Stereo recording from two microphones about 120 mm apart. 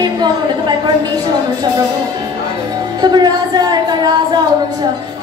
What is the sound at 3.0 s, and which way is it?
A woman's voice, 35° right (ahead or behind).